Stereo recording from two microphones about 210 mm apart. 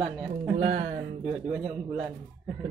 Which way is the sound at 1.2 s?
5° right (ahead or behind).